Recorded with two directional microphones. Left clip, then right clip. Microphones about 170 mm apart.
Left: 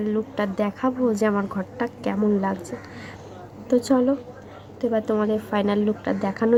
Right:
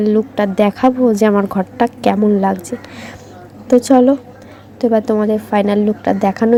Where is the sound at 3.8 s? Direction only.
25° right (ahead or behind).